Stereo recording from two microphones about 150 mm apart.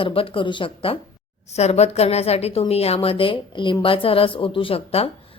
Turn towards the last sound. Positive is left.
turn(degrees=40)  # may be behind; listen again after turning